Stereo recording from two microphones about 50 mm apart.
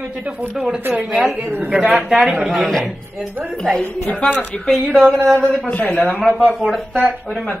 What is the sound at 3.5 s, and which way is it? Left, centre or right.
Speech, centre.